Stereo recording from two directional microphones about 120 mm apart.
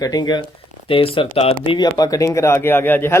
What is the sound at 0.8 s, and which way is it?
Speech, 50° left (ahead or behind).